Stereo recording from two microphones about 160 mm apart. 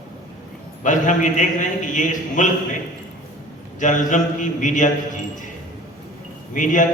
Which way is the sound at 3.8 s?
50° left (ahead or behind).